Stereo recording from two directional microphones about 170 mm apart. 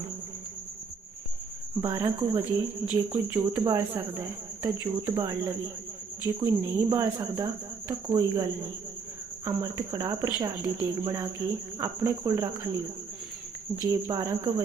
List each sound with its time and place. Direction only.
1.8 s speech: 20° right (ahead or behind)
4.1 s cricket: 15° right (ahead or behind)
5.0 s speech: 20° right (ahead or behind)
13.9 s speech: 20° right (ahead or behind)